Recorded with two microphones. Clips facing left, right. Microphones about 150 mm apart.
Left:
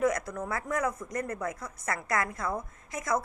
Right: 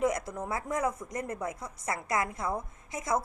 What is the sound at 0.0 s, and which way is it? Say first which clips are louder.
Speech: left 1 dB; 25° right (ahead or behind).